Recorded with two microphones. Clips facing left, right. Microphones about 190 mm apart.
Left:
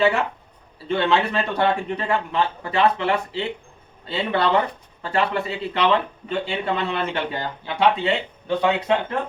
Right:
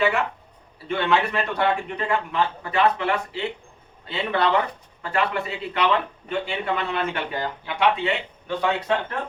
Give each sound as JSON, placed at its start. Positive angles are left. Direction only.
{"t": 0.9, "sound": "a man's voice", "side_deg": 30}